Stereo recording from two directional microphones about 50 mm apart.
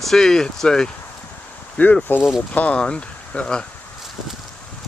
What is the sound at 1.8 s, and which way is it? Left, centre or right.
Speech, left.